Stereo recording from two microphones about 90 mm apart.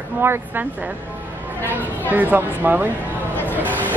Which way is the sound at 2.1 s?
20° right (ahead or behind).